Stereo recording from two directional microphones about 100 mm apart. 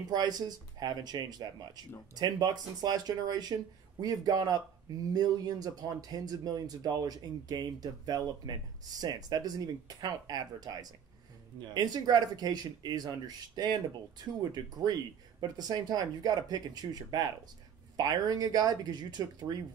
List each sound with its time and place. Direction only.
0.1 s speech: 40° right (ahead or behind)